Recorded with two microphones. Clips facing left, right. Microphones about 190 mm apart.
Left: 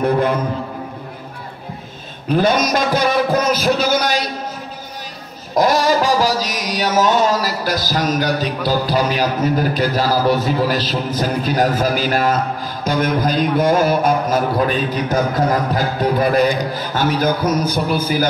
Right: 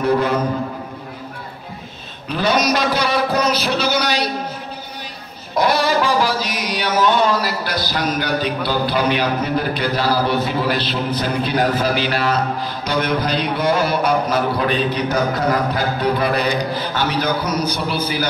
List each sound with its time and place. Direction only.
0.0 s a sound: 55° left (ahead or behind)
2.2 s mantra: 50° left (ahead or behind)
5.5 s mantra: 40° left (ahead or behind)